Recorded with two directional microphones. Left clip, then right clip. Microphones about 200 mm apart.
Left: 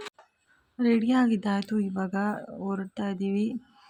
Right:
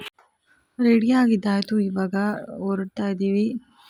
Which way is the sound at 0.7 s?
20° right (ahead or behind).